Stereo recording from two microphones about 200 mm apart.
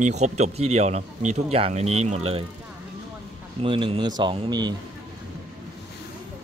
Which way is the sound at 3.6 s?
25° right (ahead or behind).